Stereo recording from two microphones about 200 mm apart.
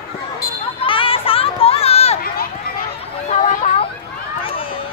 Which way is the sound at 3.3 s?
35° left (ahead or behind).